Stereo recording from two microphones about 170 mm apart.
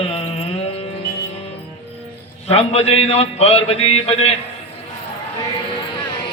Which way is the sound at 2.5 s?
40° left (ahead or behind).